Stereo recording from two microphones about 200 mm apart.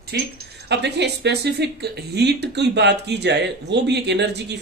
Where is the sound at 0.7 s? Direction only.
55° right (ahead or behind).